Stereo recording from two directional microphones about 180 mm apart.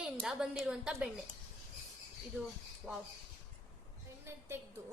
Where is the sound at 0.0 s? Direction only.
5° right (ahead or behind).